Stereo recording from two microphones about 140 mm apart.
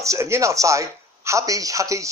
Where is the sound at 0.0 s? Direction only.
20° right (ahead or behind).